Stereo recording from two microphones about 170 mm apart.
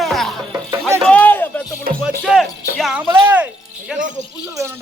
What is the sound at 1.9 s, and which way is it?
Music, 60° right (ahead or behind).